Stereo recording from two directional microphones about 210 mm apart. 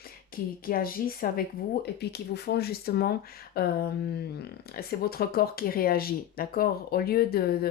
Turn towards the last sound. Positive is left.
turn(degrees=45)  # may be behind; listen again after turning